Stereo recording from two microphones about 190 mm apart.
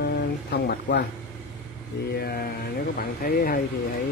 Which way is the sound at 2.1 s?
55° left (ahead or behind).